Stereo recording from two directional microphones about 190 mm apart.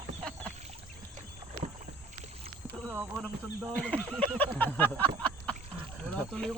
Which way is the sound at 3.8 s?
5° left (ahead or behind).